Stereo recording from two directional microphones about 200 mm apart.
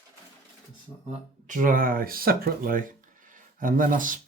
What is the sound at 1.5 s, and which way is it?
Speech, 40° right (ahead or behind).